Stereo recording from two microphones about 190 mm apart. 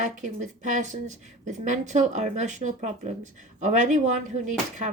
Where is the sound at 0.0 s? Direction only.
40° right (ahead or behind).